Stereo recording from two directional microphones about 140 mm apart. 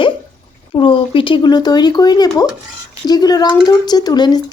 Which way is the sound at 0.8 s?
40° left (ahead or behind).